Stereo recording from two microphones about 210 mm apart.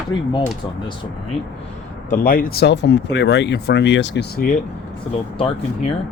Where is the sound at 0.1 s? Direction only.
65° left (ahead or behind).